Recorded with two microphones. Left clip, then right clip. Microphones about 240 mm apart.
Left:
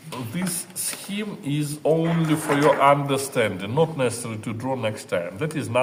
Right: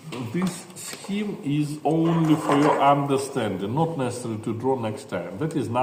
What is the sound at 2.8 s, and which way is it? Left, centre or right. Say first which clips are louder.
A man's voice: left 1 dB; left.